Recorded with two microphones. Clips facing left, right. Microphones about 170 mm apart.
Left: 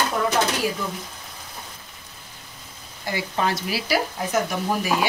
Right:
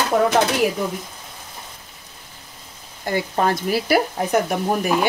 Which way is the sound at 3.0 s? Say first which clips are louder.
Right 4 dB; 50° right (ahead or behind).